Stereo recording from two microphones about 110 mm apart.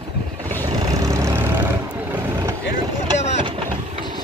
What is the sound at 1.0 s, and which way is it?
Vehicle, 25° right (ahead or behind).